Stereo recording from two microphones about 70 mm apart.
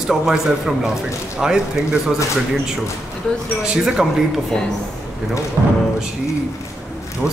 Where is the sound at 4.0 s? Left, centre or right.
Centre.